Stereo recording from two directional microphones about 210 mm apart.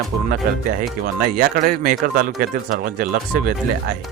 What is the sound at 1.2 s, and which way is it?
Speech, 45° right (ahead or behind).